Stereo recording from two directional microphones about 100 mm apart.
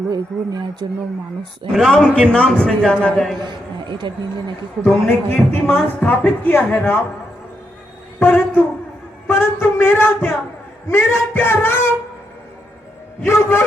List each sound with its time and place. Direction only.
0.1 s speech: 40° right (ahead or behind)
1.7 s a man's voice: centre (ahead or behind)
3.4 s speech: 50° right (ahead or behind)
5.0 s a woman's voice: 20° left (ahead or behind)
8.2 s a sound: 20° left (ahead or behind)
9.3 s speech: 25° left (ahead or behind)
13.2 s speech: 25° left (ahead or behind)